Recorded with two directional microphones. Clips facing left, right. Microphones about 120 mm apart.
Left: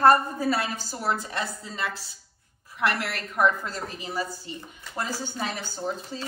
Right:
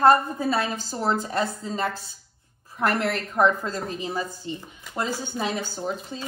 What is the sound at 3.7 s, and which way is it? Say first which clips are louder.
A woman's voice: right 5 dB; 20° right (ahead or behind).